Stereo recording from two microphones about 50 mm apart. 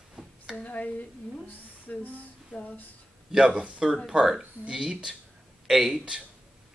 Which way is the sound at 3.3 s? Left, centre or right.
Right.